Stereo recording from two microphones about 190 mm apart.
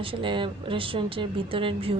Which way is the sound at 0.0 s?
25° right (ahead or behind).